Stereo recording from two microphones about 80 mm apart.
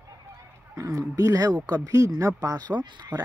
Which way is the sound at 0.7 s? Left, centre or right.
Right.